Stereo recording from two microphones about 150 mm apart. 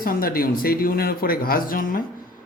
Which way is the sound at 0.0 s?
70° left (ahead or behind).